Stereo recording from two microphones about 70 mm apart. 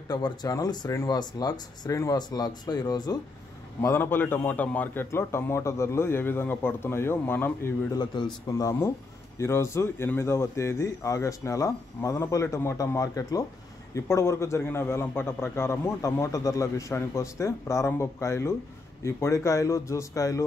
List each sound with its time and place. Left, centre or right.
0.1 s speech: left
1.0 s speech: left
1.9 s speech: left
2.1 s speech: left
3.8 s a man's voice: left
5.1 s a man's voice: left
7.9 s a man's voice: left
8.5 s speech: left
9.4 s a man's voice: left
16.0 s speech: left